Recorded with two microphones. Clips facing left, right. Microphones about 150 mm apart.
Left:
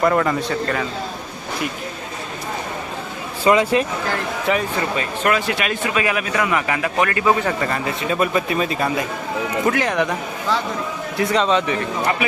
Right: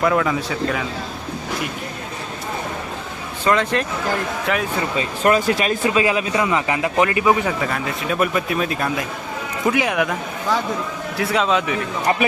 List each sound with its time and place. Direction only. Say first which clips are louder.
0.0 s a man's voice: left 1 dB; centre (ahead or behind)
3.4 s a man's voice: left 3 dB; 10° left (ahead or behind)
5.2 s a man's voice: right 4 dB; 35° right (ahead or behind); by 7.5 s 15° right (ahead or behind)
7.6 s a man's voice: left 1 dB; centre (ahead or behind)